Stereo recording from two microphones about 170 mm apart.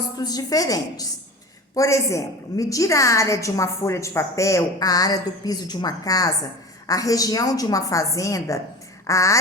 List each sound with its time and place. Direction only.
0.2 s a woman's voice: 25° left (ahead or behind)